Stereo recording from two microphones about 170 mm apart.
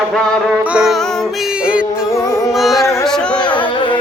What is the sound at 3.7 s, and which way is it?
Carnatic music, 30° left (ahead or behind).